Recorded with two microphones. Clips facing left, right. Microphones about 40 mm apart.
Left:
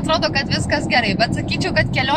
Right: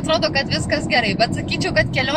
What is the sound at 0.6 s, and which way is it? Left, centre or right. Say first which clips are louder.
Speech: left 2 dB; centre.